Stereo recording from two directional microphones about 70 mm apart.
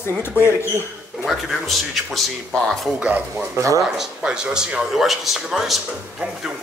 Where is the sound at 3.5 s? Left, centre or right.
Right.